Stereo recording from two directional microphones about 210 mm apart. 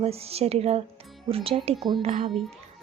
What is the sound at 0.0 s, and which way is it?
A woman's voice, 30° right (ahead or behind).